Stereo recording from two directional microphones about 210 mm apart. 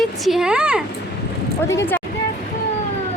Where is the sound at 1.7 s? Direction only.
10° left (ahead or behind).